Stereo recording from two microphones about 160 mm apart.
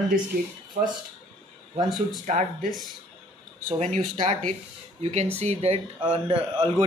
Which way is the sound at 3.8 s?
50° right (ahead or behind).